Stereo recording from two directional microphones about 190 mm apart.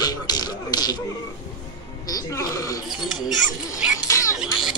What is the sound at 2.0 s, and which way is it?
Speech, 20° left (ahead or behind).